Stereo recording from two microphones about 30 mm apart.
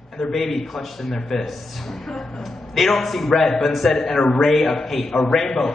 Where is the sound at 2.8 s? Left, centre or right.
Centre.